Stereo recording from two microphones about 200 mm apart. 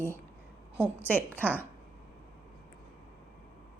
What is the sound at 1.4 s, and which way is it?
Speech, 10° right (ahead or behind).